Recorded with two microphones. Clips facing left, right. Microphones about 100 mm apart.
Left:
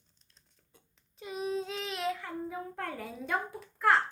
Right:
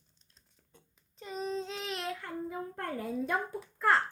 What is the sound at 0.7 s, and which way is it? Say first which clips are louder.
Child singing: right 2 dB; 10° left (ahead or behind).